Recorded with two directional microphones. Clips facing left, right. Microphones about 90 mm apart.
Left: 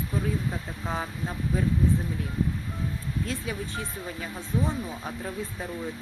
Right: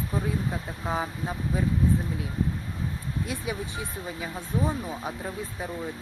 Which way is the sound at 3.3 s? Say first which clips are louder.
Even; 15° right (ahead or behind).